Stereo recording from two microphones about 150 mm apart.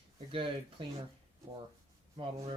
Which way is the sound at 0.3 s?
35° right (ahead or behind).